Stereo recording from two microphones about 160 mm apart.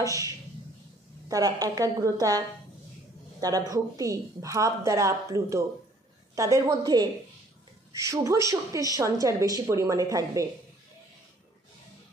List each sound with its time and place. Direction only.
0.0 s a woman's voice: 20° right (ahead or behind)
1.3 s a woman's voice: 20° right (ahead or behind)